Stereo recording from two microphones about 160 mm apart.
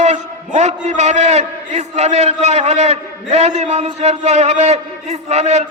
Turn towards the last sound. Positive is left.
turn(degrees=-40)  # may be behind; listen again after turning